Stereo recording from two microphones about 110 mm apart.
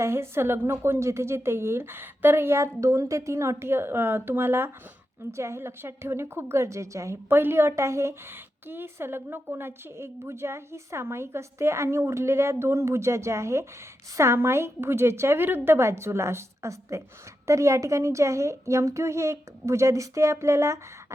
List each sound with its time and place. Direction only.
0.0 s a woman's voice: 25° right (ahead or behind)